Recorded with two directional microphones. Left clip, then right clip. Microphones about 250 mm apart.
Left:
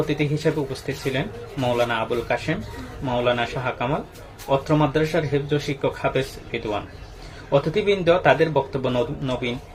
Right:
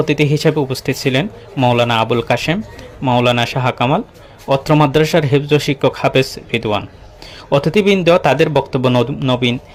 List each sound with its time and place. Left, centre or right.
0.1 s speech: right